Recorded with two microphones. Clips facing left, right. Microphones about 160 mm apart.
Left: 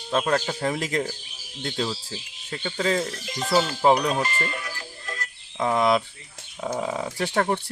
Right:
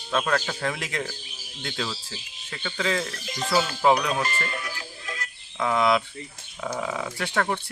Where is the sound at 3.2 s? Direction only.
Centre (ahead or behind).